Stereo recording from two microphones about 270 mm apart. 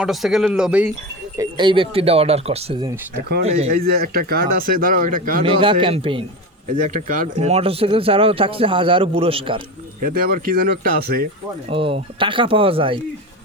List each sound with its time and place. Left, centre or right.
0.0 s speech: centre
1.4 s speech: centre
5.5 s speech: centre
6.7 s speech: right
10.0 s speech: right
11.7 s speech: centre